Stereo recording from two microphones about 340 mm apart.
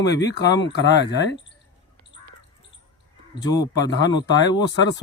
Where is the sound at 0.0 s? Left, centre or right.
Left.